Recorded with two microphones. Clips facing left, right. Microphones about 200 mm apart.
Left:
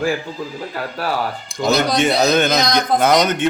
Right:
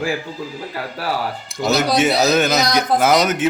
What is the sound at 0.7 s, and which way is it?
Speech, 50° left (ahead or behind).